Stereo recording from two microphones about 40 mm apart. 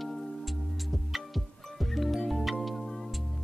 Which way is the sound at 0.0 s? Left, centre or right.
Centre.